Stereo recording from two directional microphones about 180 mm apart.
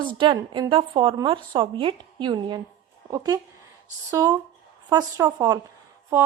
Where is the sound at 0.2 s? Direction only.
25° right (ahead or behind).